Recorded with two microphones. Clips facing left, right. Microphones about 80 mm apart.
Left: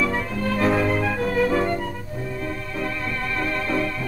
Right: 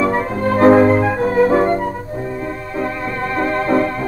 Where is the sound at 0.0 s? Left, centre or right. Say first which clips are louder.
Right 7 dB; right.